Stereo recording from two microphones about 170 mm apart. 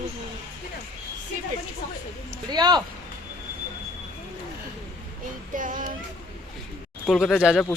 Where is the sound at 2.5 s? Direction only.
25° right (ahead or behind).